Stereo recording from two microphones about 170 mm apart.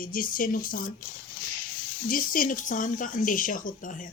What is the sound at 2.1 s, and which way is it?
Speech, 55° left (ahead or behind).